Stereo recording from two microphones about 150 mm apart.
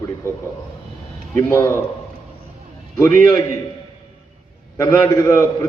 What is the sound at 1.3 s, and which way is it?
Speech, 20° left (ahead or behind).